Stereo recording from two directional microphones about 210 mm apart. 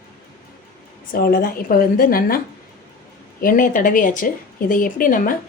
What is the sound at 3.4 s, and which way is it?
Speech, 40° left (ahead or behind).